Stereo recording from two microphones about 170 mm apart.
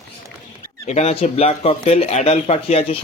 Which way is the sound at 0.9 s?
40° left (ahead or behind).